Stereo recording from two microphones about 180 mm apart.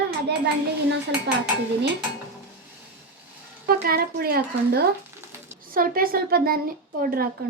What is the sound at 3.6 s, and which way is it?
A woman's voice, 55° right (ahead or behind).